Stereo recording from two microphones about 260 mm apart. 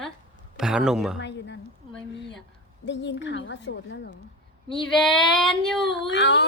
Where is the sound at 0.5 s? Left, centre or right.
Centre.